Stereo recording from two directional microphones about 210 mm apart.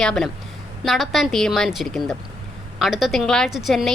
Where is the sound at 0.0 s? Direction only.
Centre (ahead or behind).